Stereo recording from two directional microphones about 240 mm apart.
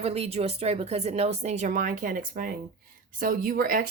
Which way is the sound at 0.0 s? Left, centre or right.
Right.